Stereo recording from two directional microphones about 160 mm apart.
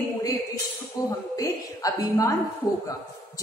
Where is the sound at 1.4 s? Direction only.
20° left (ahead or behind).